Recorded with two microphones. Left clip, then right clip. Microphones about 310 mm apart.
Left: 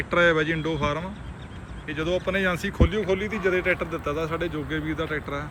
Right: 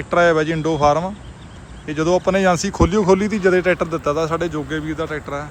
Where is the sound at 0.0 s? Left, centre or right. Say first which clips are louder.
Right 5 dB; centre.